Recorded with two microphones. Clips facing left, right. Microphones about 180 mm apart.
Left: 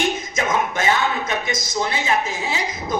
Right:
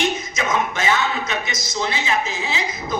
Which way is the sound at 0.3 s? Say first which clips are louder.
Left 3 dB; 50° left (ahead or behind).